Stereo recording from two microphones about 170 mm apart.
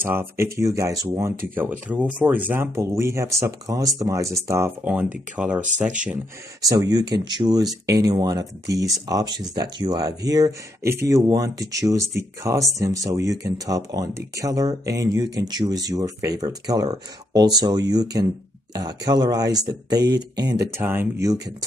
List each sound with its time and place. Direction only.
0.0 s speech: 15° right (ahead or behind)
6.7 s speech: 20° right (ahead or behind)